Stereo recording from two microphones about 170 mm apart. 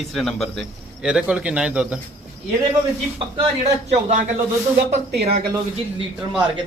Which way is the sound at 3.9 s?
45° right (ahead or behind).